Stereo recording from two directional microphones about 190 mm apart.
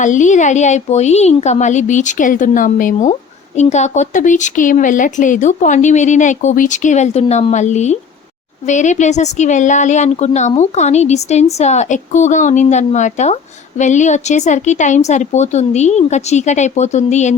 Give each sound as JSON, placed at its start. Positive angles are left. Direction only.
{"t": 0.0, "sound": "a woman's voice", "side_deg": 40}